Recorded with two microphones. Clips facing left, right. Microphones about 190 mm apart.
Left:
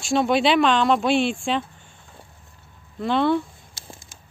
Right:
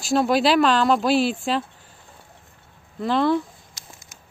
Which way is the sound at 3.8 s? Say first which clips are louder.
Left 7 dB; 30° left (ahead or behind).